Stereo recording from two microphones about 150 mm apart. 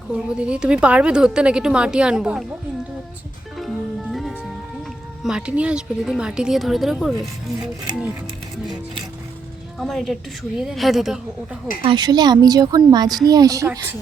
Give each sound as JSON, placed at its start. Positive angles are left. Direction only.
{"t": 0.1, "sound": "a woman's voice", "side_deg": -5}
{"t": 3.6, "sound": "music", "side_deg": 0}
{"t": 5.2, "sound": "a woman's voice", "side_deg": -5}
{"t": 9.7, "sound": "a woman's voice", "side_deg": 0}
{"t": 11.8, "sound": "speech", "side_deg": -30}